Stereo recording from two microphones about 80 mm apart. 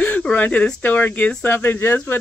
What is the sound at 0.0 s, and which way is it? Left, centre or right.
Speech, centre.